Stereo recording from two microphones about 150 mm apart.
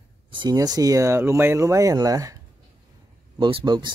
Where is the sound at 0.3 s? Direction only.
30° right (ahead or behind).